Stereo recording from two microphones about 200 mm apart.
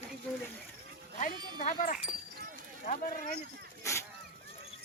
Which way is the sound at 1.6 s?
40° left (ahead or behind).